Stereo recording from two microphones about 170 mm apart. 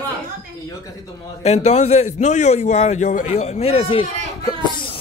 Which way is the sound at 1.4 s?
40° left (ahead or behind).